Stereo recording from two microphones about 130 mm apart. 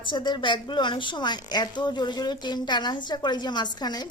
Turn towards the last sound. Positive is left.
turn(degrees=30)  # may be behind; listen again after turning